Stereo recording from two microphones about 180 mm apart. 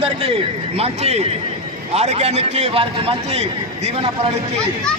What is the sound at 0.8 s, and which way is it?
A man's voice, 35° right (ahead or behind).